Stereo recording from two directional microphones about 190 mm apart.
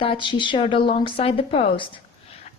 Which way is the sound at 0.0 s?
25° left (ahead or behind).